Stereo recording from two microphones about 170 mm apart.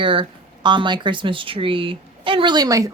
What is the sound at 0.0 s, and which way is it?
Speech, 30° right (ahead or behind).